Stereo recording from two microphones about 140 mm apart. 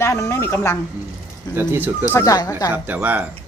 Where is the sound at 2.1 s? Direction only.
25° left (ahead or behind).